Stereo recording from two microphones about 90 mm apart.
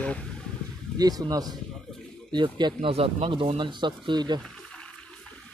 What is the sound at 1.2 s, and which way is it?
Speech, 45° right (ahead or behind).